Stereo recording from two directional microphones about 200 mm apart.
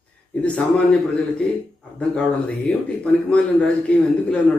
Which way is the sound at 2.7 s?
5° left (ahead or behind).